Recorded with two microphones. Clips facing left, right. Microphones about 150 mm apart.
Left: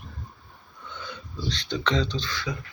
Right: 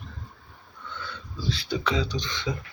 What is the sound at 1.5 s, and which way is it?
Speech, 10° right (ahead or behind).